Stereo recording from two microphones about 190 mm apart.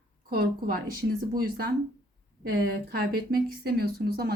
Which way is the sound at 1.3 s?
50° right (ahead or behind).